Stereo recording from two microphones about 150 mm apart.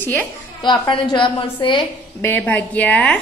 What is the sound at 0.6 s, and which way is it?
A woman's voice, 30° left (ahead or behind).